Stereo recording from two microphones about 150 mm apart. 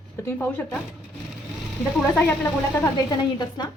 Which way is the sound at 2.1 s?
15° left (ahead or behind).